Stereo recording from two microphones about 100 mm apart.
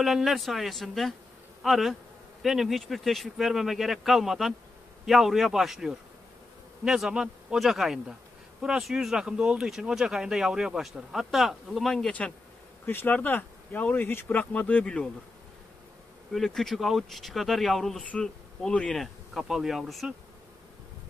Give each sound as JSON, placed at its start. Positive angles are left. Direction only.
{"t": 0.0, "sound": "speech", "side_deg": 0}
{"t": 12.8, "sound": "speech", "side_deg": 20}
{"t": 16.3, "sound": "speech", "side_deg": 5}